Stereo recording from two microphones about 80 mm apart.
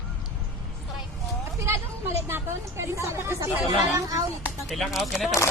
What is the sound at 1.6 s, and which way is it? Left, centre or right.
A woman's voice, right.